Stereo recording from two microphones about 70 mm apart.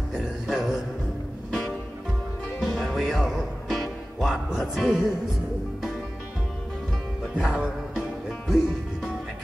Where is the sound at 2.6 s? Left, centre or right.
Centre.